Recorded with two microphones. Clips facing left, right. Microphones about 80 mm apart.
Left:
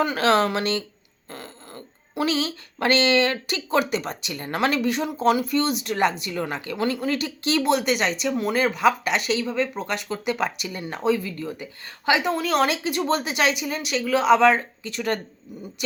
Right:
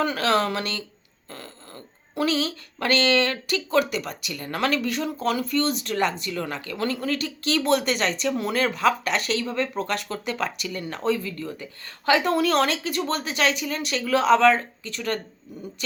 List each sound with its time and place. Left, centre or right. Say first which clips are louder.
0.0 s speech: left 2 dB; left
7.6 s speech: left 1 dB; centre
12.3 s speech: right 1 dB; centre